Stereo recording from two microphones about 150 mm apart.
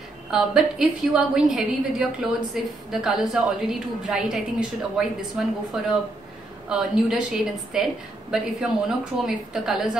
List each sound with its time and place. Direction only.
0.3 s a woman's voice: 5° right (ahead or behind)
6.7 s a woman's voice: 5° right (ahead or behind)